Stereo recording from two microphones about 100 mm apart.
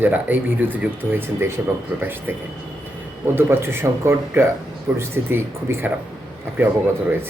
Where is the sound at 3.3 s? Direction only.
25° right (ahead or behind).